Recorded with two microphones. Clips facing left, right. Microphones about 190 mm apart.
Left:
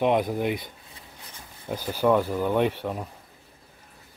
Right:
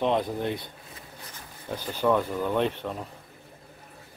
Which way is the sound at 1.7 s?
10° left (ahead or behind).